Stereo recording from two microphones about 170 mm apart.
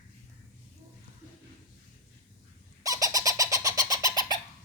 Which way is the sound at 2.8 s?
20° right (ahead or behind).